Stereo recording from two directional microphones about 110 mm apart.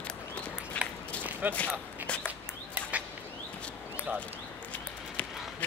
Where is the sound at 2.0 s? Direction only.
10° left (ahead or behind).